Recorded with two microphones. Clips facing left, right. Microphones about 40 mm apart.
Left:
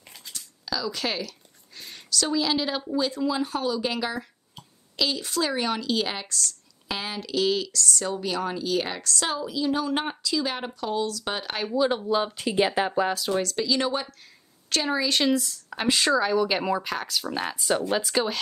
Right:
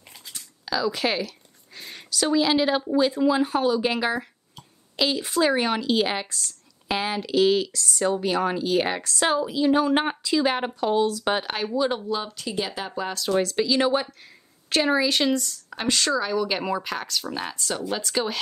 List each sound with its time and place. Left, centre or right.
0.3 s a sound: right
1.8 s a woman's voice: centre
11.5 s speech: centre
12.1 s speech: centre
12.4 s speech: left
13.0 s speech: centre
13.4 s speech: centre
15.0 s speech: centre
18.0 s speech: centre